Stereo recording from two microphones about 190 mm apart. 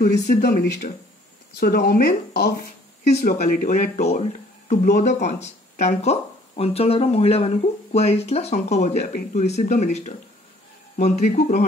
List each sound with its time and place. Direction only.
0.0 s speech: 55° left (ahead or behind)
3.2 s speech: 45° left (ahead or behind)